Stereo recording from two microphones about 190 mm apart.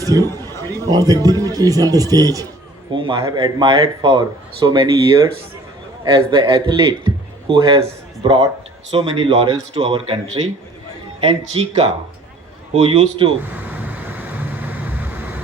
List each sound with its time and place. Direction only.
0.2 s a sound: 15° left (ahead or behind)
0.9 s speech: 20° right (ahead or behind)
2.9 s a sound: 25° right (ahead or behind)
3.2 s a man's voice: 20° right (ahead or behind)
11.6 s speech: 30° right (ahead or behind)
12.7 s speech: 30° right (ahead or behind)
13.5 s vehicle: 10° right (ahead or behind)